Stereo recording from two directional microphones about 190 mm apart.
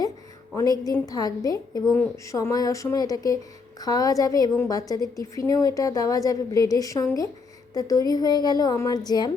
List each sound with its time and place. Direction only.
0.5 s a woman's voice: 20° left (ahead or behind)